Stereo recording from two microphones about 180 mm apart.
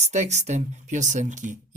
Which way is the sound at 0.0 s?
40° right (ahead or behind).